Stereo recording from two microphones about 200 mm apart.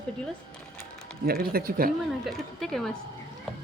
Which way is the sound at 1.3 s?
50° right (ahead or behind).